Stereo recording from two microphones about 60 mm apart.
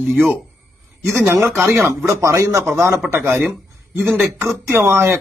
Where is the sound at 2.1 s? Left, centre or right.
Right.